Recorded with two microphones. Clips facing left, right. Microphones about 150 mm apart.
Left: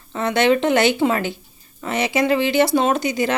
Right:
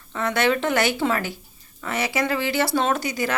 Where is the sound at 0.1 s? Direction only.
20° left (ahead or behind).